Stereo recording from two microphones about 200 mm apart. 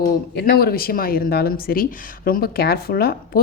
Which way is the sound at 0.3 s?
50° left (ahead or behind).